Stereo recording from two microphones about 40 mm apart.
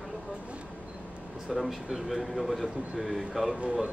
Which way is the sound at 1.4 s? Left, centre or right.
Centre.